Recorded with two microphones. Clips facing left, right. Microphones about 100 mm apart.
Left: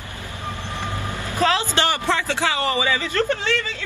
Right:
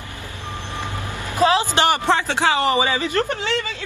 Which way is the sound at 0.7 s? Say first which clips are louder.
Even; 15° right (ahead or behind).